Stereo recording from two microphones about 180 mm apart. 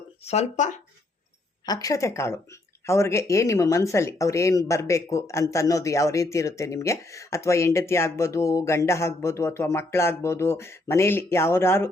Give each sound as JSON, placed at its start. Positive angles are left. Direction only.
{"t": 0.3, "sound": "speech", "side_deg": 40}
{"t": 1.6, "sound": "speech", "side_deg": 20}